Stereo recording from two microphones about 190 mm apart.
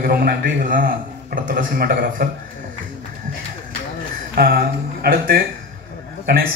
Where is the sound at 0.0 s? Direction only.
50° right (ahead or behind).